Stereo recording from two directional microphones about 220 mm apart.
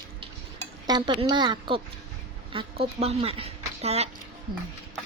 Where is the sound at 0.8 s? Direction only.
20° right (ahead or behind).